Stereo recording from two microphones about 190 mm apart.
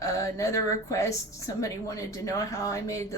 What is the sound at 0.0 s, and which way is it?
A woman's voice, 15° left (ahead or behind).